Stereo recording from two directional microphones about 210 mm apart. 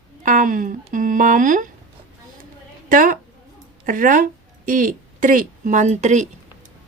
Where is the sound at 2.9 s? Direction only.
40° right (ahead or behind).